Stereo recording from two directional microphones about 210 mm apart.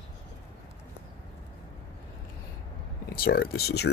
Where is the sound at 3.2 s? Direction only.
45° left (ahead or behind).